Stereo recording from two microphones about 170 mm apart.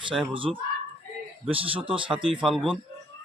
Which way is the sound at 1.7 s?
30° right (ahead or behind).